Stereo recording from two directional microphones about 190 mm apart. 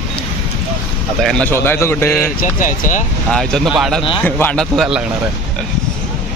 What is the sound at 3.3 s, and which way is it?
A man's voice, 5° left (ahead or behind).